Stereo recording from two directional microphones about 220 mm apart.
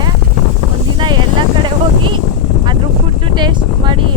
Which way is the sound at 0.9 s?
20° right (ahead or behind).